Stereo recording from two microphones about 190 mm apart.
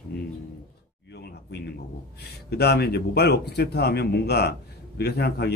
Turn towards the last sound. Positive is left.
turn(degrees=60)  # may be behind; listen again after turning